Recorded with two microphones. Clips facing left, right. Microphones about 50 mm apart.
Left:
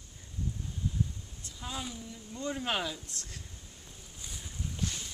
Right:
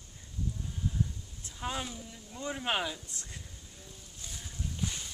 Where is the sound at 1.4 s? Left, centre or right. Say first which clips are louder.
Right 4 dB; right.